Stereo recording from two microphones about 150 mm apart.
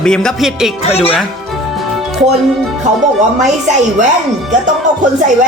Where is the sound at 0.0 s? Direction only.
5° left (ahead or behind).